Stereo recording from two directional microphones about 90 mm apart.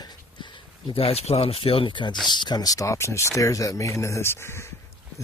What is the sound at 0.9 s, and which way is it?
Speech, 90° left.